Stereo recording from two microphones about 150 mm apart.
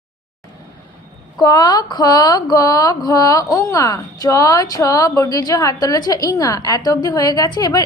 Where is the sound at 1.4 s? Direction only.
25° left (ahead or behind).